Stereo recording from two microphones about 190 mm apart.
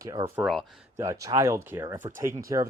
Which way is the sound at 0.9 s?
15° right (ahead or behind).